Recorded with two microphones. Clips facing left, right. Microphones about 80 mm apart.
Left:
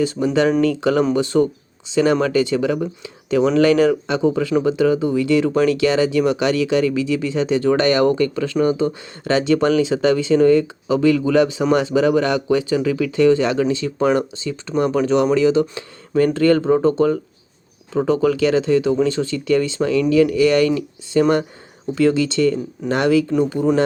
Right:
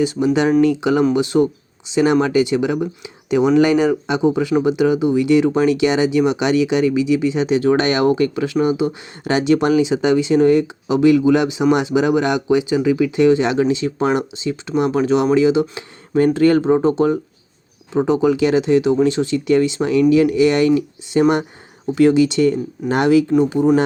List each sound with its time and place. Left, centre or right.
0.0 s speech: centre